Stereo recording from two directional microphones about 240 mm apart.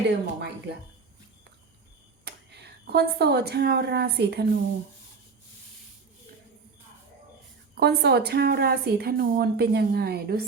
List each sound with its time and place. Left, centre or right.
0.1 s speech: right
2.2 s speech: right
7.8 s a woman's voice: right